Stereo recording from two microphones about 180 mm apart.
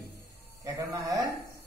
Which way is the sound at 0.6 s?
15° right (ahead or behind).